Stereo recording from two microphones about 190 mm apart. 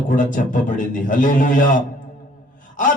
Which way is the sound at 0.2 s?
45° left (ahead or behind).